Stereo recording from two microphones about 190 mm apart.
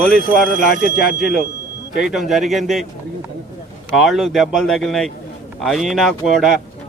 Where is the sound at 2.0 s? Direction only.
Centre (ahead or behind).